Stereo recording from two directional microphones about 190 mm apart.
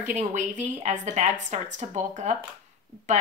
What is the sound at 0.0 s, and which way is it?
A woman's voice, 40° right (ahead or behind).